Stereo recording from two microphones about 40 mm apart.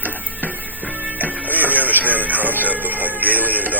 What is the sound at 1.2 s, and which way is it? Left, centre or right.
Music, right.